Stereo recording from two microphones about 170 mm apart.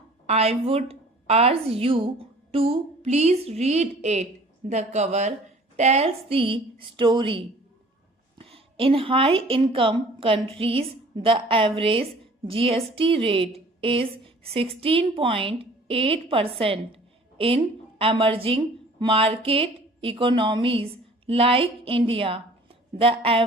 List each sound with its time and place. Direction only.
0.3 s a woman's voice: 35° right (ahead or behind)